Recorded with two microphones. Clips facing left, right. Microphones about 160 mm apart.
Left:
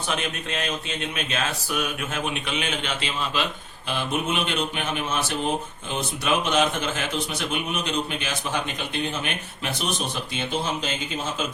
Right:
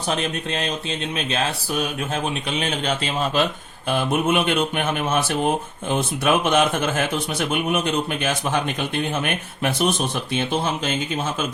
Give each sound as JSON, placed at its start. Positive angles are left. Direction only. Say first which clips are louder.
{"t": 0.1, "sound": "a man's voice", "louder": "right 5 dB", "side_deg": -35}